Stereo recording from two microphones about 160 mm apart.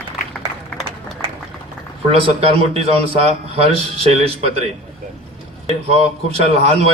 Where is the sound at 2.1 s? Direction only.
40° right (ahead or behind).